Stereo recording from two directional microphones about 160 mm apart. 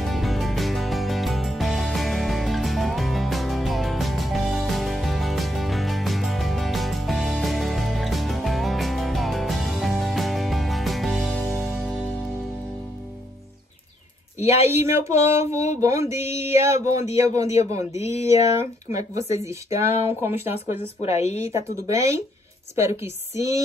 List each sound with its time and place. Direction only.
0.0 s music: centre (ahead or behind)
14.4 s speech: 40° left (ahead or behind)
14.7 s a sound: 15° right (ahead or behind)
15.8 s speech: 20° right (ahead or behind)
20.2 s a sound: 15° right (ahead or behind)
21.0 s a woman's voice: 40° left (ahead or behind)
21.5 s speech: 20° right (ahead or behind)